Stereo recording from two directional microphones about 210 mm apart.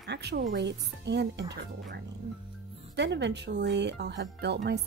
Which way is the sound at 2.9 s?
55° right (ahead or behind).